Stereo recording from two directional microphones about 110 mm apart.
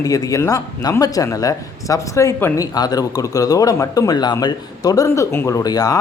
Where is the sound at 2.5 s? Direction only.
35° left (ahead or behind).